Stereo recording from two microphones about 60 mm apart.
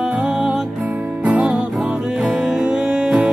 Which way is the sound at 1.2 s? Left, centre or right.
Right.